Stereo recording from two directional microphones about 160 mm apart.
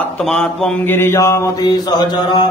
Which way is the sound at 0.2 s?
5° left (ahead or behind).